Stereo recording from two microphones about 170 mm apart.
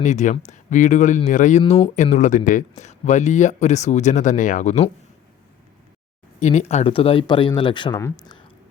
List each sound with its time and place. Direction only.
0.0 s speech: 45° left (ahead or behind)
6.4 s speech: 45° left (ahead or behind); by 8.7 s 25° left (ahead or behind)